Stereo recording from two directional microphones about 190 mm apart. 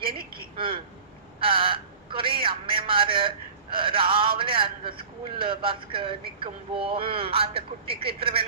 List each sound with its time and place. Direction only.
0.5 s a man's voice: 25° right (ahead or behind)